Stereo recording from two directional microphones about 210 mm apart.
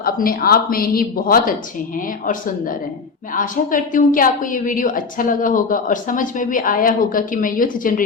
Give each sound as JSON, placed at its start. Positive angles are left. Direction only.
{"t": 0.0, "sound": "a woman's voice", "side_deg": 45}